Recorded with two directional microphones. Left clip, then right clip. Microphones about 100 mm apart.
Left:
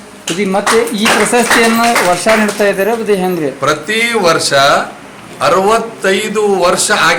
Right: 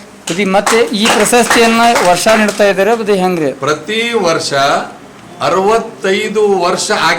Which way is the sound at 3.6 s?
10° left (ahead or behind).